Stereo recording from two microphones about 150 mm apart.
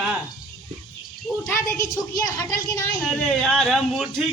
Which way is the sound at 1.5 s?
15° left (ahead or behind).